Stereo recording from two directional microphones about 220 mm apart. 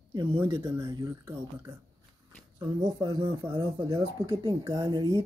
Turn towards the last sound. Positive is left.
turn(degrees=-15)  # may be behind; listen again after turning